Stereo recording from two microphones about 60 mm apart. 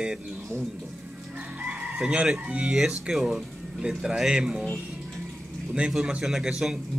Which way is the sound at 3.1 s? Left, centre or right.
Centre.